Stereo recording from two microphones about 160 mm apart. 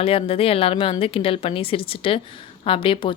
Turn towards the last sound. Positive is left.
turn(degrees=35)  # may be behind; listen again after turning